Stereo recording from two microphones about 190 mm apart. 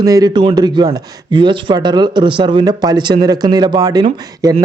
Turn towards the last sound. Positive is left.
turn(degrees=-20)  # may be behind; listen again after turning